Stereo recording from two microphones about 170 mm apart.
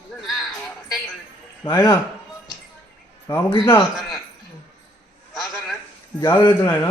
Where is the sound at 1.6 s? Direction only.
15° left (ahead or behind).